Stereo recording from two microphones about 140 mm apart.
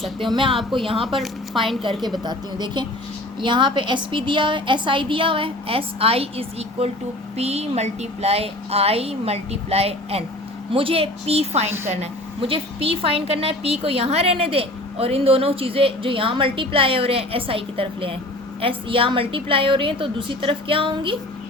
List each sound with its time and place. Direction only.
0.3 s a woman's voice: 40° right (ahead or behind)
2.2 s a woman's voice: 30° right (ahead or behind)